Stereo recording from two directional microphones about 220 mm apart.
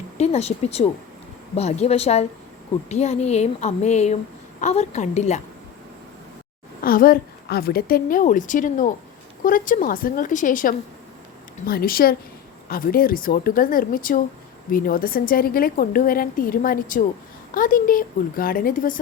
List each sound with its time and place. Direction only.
0.2 s a woman's voice: 30° left (ahead or behind)
6.8 s a woman's voice: 40° left (ahead or behind)